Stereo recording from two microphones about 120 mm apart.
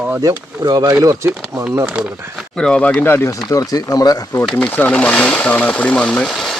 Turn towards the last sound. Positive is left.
turn(degrees=0)  # may be behind; listen again after turning